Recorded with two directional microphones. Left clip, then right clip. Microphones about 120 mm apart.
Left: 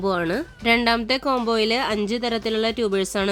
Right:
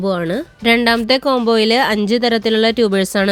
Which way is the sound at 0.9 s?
40° right (ahead or behind).